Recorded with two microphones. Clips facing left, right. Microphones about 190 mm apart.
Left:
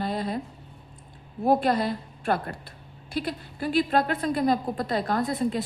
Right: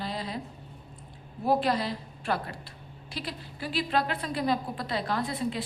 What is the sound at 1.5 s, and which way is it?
A woman's voice, 50° left (ahead or behind).